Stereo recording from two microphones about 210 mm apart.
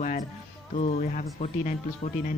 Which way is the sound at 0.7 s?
35° left (ahead or behind).